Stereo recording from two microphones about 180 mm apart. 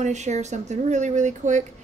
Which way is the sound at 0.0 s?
40° right (ahead or behind).